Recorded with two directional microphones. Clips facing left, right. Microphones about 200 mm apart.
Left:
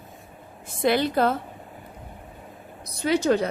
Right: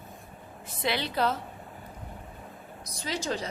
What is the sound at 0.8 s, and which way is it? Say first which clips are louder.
Speech: left 8 dB; 50° left (ahead or behind).